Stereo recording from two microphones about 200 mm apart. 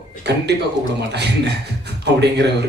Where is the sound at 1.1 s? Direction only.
55° right (ahead or behind).